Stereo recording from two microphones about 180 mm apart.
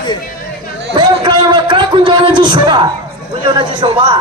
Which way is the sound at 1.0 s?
25° right (ahead or behind).